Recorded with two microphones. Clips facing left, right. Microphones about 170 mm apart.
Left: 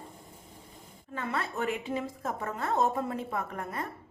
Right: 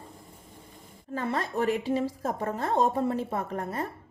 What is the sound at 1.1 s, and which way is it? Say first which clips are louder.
A woman's voice: right 4 dB; 35° right (ahead or behind).